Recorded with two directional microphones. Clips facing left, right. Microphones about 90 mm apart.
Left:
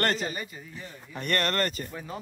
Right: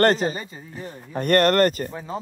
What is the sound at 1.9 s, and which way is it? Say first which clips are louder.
Speech: right 5 dB; 25° right (ahead or behind).